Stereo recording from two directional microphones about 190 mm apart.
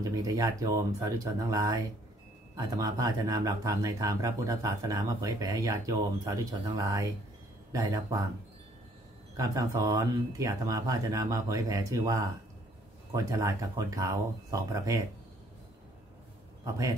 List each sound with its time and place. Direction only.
0.1 s speech: 20° right (ahead or behind)
9.4 s speech: 15° right (ahead or behind)
16.6 s a man's voice: 15° right (ahead or behind)